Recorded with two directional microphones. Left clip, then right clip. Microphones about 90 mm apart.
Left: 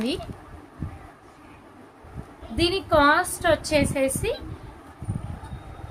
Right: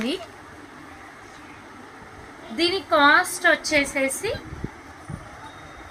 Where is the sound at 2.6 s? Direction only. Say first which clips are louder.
Right 1 dB; 40° left (ahead or behind).